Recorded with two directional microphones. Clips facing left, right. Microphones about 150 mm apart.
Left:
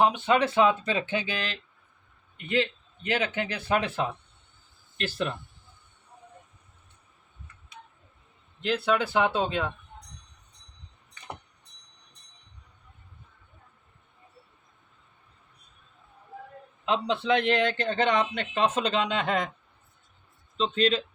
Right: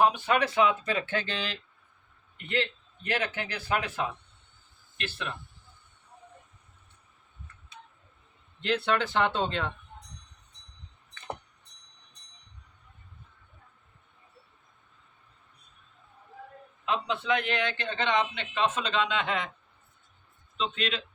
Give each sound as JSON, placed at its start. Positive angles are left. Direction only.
{"t": 0.0, "sound": "speech", "side_deg": 25}
{"t": 1.3, "sound": "speech", "side_deg": 0}
{"t": 2.4, "sound": "a man's voice", "side_deg": 15}
{"t": 4.9, "sound": "a man's voice", "side_deg": 40}
{"t": 8.6, "sound": "a man's voice", "side_deg": 0}
{"t": 16.8, "sound": "a man's voice", "side_deg": 30}
{"t": 20.6, "sound": "a man's voice", "side_deg": 35}